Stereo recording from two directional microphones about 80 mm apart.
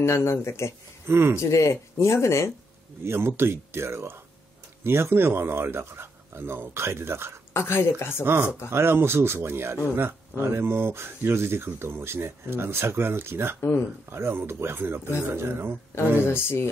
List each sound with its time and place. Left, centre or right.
0.0 s speech: left
1.0 s speech: right
1.4 s speech: left
3.1 s speech: right
7.5 s speech: left
8.2 s speech: right
13.6 s speech: left
14.1 s speech: right
16.3 s speech: left